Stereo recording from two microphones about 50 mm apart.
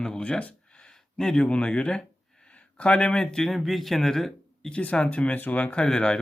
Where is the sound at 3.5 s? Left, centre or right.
Centre.